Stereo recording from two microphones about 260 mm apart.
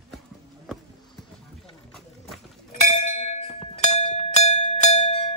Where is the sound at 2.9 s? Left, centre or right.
Left.